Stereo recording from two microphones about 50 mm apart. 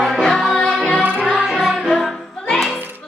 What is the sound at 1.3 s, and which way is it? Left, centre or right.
Music, centre.